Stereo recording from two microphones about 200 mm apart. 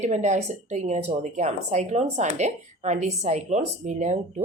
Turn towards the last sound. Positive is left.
turn(degrees=-35)  # may be behind; listen again after turning